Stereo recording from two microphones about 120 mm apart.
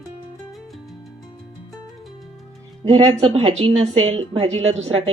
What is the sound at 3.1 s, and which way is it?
A woman's voice, 55° right (ahead or behind).